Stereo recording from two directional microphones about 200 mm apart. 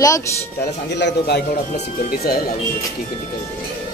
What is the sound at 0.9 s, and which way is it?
A man's voice, 55° left (ahead or behind).